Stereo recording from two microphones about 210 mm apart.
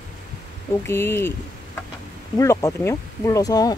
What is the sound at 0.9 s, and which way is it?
Speech, 10° left (ahead or behind).